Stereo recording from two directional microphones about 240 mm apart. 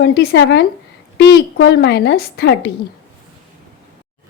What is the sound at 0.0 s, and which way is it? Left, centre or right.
A woman's voice, left.